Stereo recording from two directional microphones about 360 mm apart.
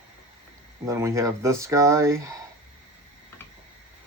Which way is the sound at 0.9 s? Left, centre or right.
Centre.